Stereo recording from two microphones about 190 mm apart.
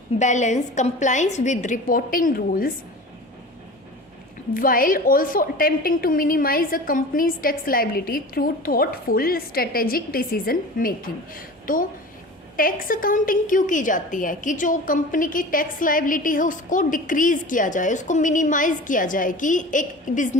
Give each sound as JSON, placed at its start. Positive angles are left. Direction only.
{"t": 0.2, "sound": "a woman's voice", "side_deg": 40}
{"t": 4.5, "sound": "a woman's voice", "side_deg": 45}